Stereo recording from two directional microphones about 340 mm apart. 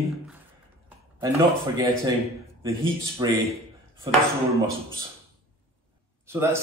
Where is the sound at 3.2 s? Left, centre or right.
Centre.